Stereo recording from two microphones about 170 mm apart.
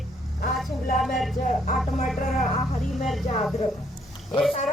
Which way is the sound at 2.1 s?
55° left (ahead or behind).